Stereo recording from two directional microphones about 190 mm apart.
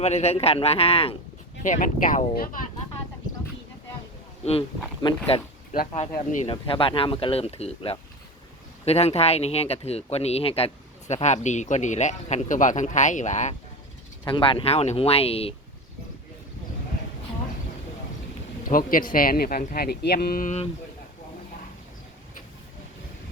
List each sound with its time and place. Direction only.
0.0 s speech: 35° left (ahead or behind)
1.6 s speech: 45° left (ahead or behind)
5.0 s speech: 25° left (ahead or behind)
6.1 s speech: 40° left (ahead or behind)
6.5 s speech: 30° left (ahead or behind)
14.3 s speech: 25° left (ahead or behind)
18.6 s speech: 45° left (ahead or behind)